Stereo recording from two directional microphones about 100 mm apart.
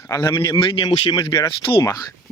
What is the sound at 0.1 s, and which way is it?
Speech, 30° left (ahead or behind).